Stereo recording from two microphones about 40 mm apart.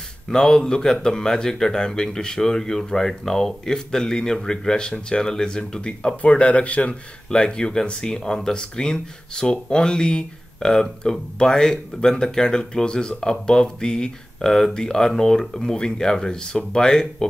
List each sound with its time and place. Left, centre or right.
0.3 s speech: centre